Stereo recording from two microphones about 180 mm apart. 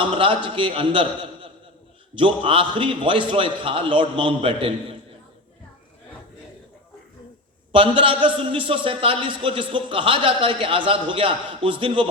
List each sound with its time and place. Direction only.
0.0 s a man's voice: 25° right (ahead or behind)
7.7 s a man's voice: 30° right (ahead or behind)